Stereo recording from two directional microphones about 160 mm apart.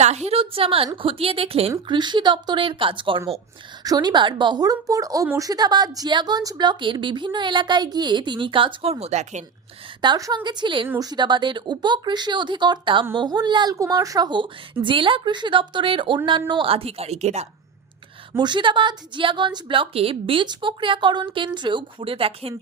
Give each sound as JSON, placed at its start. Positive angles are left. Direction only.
{"t": 0.3, "sound": "a woman's voice", "side_deg": -35}
{"t": 10.0, "sound": "a woman's voice", "side_deg": -25}
{"t": 10.8, "sound": "speech", "side_deg": -15}
{"t": 11.1, "sound": "a woman's voice", "side_deg": -30}
{"t": 18.3, "sound": "a woman's voice", "side_deg": -30}